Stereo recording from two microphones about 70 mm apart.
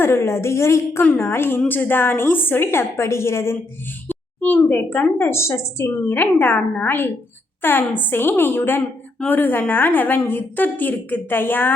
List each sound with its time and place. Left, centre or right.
0.0 s a woman's voice: left
4.1 s a woman's voice: left
6.1 s a woman's voice: left